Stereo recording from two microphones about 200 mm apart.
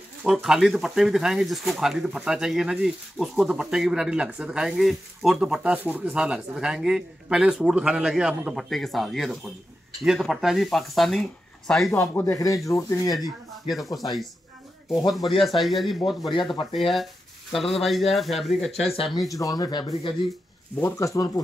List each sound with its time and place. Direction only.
0.2 s speech: centre (ahead or behind)
11.9 s speech: 10° left (ahead or behind)
13.7 s speech: centre (ahead or behind)
16.2 s speech: 25° left (ahead or behind)
16.7 s speech: centre (ahead or behind)
18.9 s speech: 20° left (ahead or behind)